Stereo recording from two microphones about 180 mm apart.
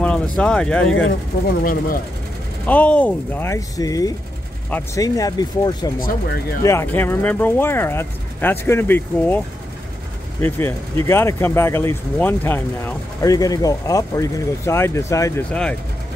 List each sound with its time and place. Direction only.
0.4 s speech: 5° left (ahead or behind)
1.6 s speech: 50° left (ahead or behind)
2.6 s speech: 5° left (ahead or behind)
5.9 s speech: 55° left (ahead or behind)
6.6 s speech: 15° left (ahead or behind)
10.4 s speech: 15° left (ahead or behind)